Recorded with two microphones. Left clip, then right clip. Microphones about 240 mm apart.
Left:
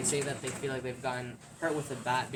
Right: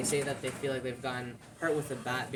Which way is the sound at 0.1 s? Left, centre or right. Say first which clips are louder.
Right 1 dB; centre.